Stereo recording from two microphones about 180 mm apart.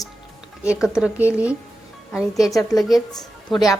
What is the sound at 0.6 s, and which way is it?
Speech, 5° right (ahead or behind).